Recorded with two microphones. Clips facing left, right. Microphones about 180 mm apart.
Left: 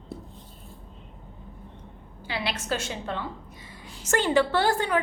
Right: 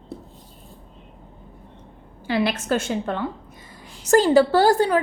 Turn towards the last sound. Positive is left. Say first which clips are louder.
# right 7 dB
turn(degrees=-35)  # may be behind; listen again after turning